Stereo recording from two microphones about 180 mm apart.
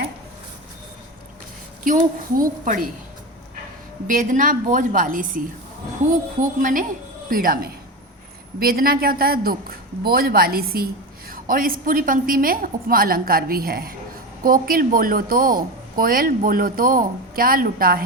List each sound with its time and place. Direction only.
2.3 s speech: 50° right (ahead or behind)
4.0 s speech: 45° right (ahead or behind)
6.4 s a woman's voice: 50° right (ahead or behind)